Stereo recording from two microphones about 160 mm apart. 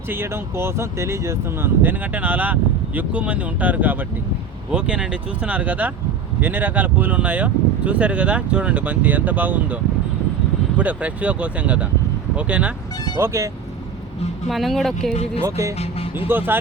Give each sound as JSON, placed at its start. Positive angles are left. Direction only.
{"t": 0.1, "sound": "speech", "side_deg": -15}
{"t": 14.4, "sound": "speech", "side_deg": 0}
{"t": 15.4, "sound": "speech", "side_deg": -20}